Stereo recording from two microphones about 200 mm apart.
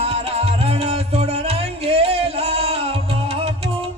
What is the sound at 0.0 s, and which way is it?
Music, 30° right (ahead or behind).